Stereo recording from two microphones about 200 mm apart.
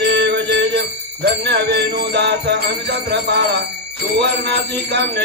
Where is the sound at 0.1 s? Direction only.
55° right (ahead or behind).